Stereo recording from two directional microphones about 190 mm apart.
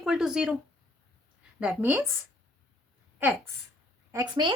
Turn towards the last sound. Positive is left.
turn(degrees=-20)  # may be behind; listen again after turning